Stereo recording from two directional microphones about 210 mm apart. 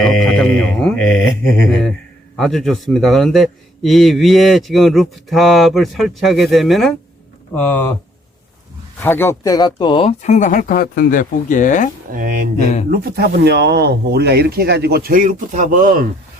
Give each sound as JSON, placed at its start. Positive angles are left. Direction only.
{"t": 0.2, "sound": "speech", "side_deg": 0}
{"t": 2.4, "sound": "a man's voice", "side_deg": 0}
{"t": 9.0, "sound": "speech", "side_deg": 10}
{"t": 12.1, "sound": "speech", "side_deg": -40}
{"t": 12.5, "sound": "speech", "side_deg": 35}
{"t": 12.9, "sound": "speech", "side_deg": -50}